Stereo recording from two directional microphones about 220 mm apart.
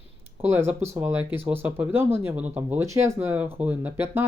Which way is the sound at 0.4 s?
10° right (ahead or behind).